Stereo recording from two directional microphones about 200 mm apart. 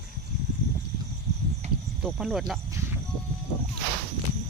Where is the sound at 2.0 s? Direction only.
5° right (ahead or behind).